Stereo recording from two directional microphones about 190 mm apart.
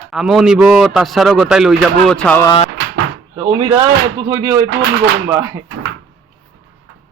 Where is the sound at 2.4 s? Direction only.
25° left (ahead or behind).